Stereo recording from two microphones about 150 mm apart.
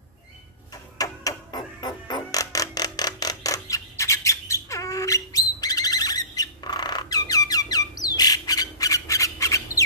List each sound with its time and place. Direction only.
0.9 s music: 25° left (ahead or behind)